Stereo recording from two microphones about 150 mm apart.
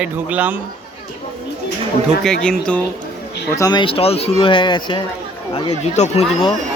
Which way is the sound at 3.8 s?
40° left (ahead or behind).